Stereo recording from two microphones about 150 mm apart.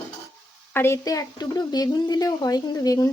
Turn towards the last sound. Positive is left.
turn(degrees=25)  # may be behind; listen again after turning